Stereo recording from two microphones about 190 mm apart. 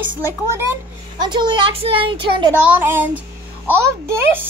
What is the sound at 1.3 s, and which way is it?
Speech, 25° right (ahead or behind).